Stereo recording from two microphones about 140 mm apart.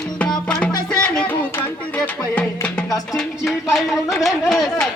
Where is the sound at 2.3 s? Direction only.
10° left (ahead or behind).